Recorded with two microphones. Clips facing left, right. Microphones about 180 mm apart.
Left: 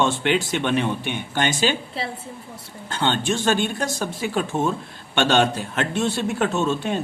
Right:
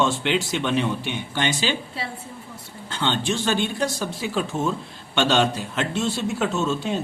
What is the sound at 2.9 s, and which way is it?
A man's voice, 50° left (ahead or behind).